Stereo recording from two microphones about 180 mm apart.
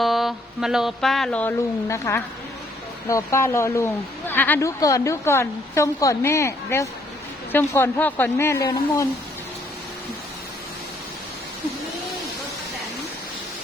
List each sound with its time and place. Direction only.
0.0 s music: centre (ahead or behind); by 2.2 s 15° left (ahead or behind)
3.1 s a woman's voice: 15° left (ahead or behind)